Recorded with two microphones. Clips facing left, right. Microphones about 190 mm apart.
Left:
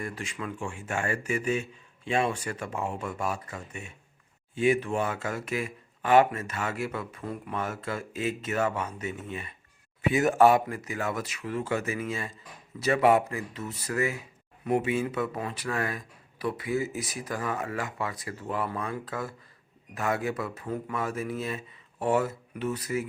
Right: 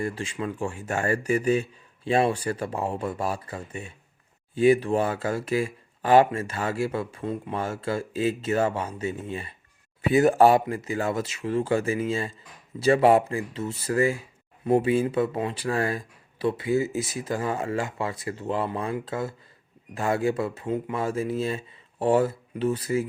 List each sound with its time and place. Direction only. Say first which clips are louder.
0.0 s speech: right 6 dB; 30° right (ahead or behind)